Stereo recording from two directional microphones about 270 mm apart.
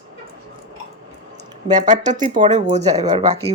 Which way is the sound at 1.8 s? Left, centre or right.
Right.